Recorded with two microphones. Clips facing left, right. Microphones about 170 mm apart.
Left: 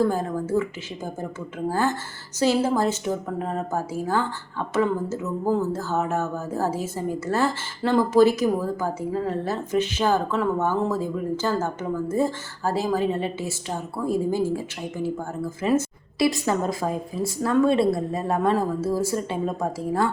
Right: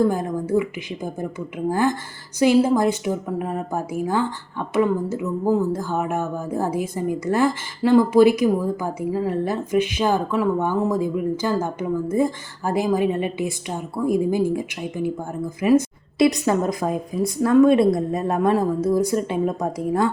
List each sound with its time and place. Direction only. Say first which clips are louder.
0.0 s speech: right 2 dB; 15° right (ahead or behind)